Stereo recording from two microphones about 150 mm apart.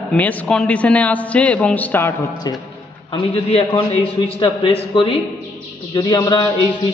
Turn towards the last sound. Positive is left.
turn(degrees=25)  # may be behind; listen again after turning